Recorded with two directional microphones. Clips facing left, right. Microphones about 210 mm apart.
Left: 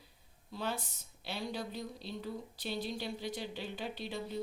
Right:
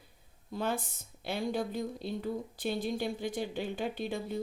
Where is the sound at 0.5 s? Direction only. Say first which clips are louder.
Right 5 dB; 50° right (ahead or behind).